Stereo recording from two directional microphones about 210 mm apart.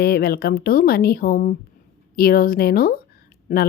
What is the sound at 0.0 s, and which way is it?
A woman's voice, 45° left (ahead or behind).